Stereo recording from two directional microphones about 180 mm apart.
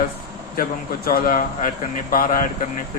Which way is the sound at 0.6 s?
55° left (ahead or behind).